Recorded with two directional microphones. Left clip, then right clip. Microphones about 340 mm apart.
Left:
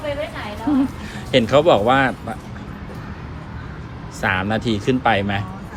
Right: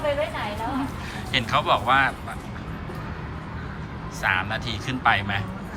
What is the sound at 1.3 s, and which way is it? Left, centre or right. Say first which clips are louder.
A man's voice: left 8 dB; centre.